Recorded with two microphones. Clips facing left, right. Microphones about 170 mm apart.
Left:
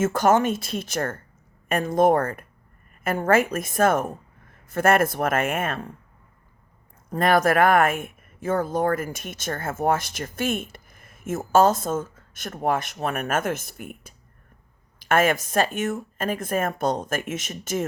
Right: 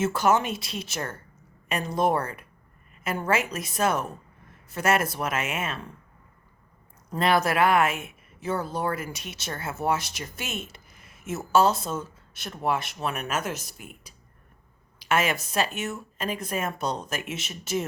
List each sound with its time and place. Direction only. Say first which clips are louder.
0.0 s a woman's voice: left 4 dB; 50° left (ahead or behind)
7.1 s speech: left 4 dB; 50° left (ahead or behind)